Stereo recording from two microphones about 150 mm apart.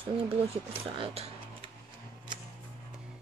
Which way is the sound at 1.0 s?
40° right (ahead or behind).